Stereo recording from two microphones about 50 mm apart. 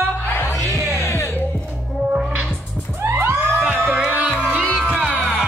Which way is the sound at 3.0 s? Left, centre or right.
Right.